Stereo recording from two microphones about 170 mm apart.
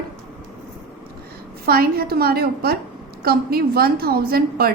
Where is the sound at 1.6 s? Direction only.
60° right (ahead or behind).